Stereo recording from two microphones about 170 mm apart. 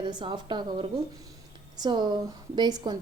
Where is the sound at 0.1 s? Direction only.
25° right (ahead or behind).